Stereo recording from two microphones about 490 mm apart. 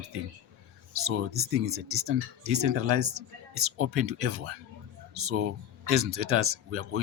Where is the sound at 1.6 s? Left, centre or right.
Right.